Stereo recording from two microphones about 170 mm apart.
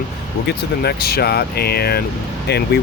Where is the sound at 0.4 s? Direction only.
65° left (ahead or behind).